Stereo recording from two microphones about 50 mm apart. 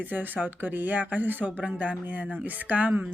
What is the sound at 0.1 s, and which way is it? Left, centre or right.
Speech, right.